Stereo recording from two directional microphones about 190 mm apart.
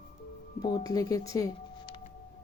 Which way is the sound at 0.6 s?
20° left (ahead or behind).